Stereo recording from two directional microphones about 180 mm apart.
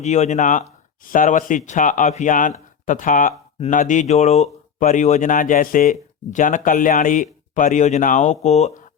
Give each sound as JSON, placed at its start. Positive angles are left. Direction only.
{"t": 0.0, "sound": "speech", "side_deg": 40}